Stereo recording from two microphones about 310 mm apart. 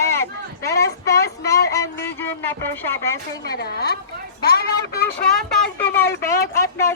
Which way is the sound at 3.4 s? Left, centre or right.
Left.